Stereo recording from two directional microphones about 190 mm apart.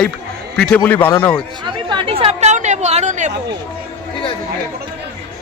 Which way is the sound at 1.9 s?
30° right (ahead or behind).